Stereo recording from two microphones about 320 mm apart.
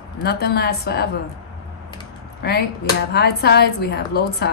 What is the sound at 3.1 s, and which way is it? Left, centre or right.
A woman's voice, left.